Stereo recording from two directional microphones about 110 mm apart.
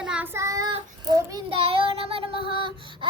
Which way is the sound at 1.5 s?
60° right (ahead or behind).